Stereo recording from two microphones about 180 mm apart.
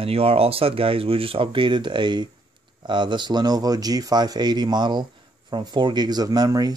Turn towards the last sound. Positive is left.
turn(degrees=-20)  # may be behind; listen again after turning